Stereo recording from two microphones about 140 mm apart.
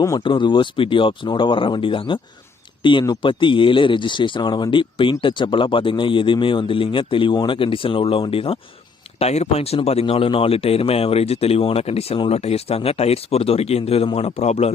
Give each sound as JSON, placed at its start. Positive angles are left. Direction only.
{"t": 0.2, "sound": "speech", "side_deg": 35}